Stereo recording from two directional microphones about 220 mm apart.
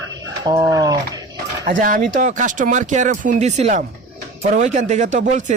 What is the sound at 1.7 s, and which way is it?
A man's voice, 40° right (ahead or behind).